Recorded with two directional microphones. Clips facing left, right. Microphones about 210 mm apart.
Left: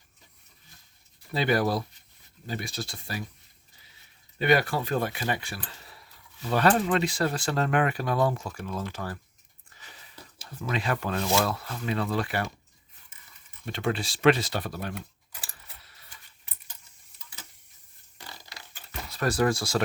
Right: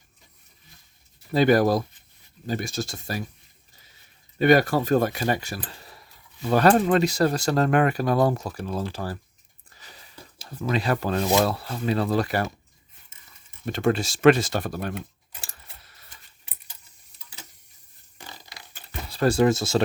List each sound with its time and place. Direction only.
1.3 s speech: 45° right (ahead or behind)
4.4 s speech: 45° right (ahead or behind)
9.7 s a sound: 35° right (ahead or behind)
10.6 s speech: 35° right (ahead or behind)
13.7 s speech: 45° right (ahead or behind)
14.9 s a sound: 25° right (ahead or behind)
18.9 s speech: 30° right (ahead or behind)